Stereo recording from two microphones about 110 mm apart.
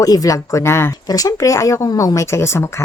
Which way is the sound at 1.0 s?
35° left (ahead or behind).